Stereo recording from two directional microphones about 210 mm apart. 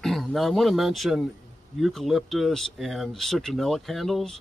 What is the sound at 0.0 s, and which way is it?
Speech, centre (ahead or behind).